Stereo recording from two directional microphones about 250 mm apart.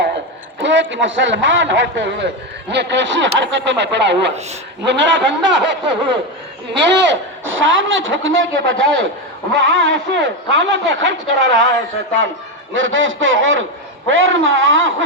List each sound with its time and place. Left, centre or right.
0.6 s a man's voice: right
12.7 s a man's voice: right